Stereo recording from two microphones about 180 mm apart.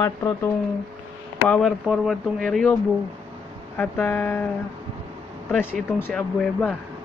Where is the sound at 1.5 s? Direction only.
Centre (ahead or behind).